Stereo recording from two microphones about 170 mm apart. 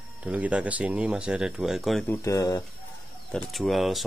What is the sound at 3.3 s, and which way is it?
Speech, centre (ahead or behind).